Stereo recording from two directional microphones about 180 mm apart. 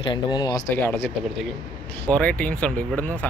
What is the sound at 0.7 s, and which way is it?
Speech, 10° left (ahead or behind).